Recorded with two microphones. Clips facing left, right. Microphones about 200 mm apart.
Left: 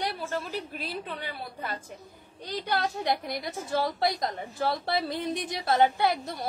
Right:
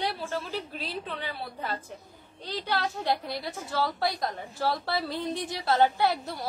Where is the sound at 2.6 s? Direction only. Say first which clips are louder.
Left 1 dB; 15° left (ahead or behind).